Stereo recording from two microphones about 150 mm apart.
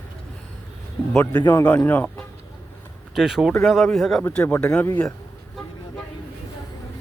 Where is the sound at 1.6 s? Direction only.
10° left (ahead or behind).